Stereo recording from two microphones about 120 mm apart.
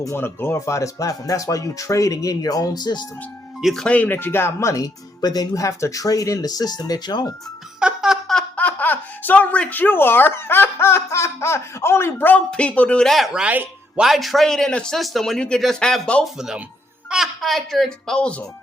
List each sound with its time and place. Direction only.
0.0 s speech: 20° left (ahead or behind); by 3.1 s 35° left (ahead or behind)
3.6 s speech: centre (ahead or behind); by 7.3 s 35° left (ahead or behind)
7.8 s speech: 5° right (ahead or behind)
14.0 s a child's voice: centre (ahead or behind)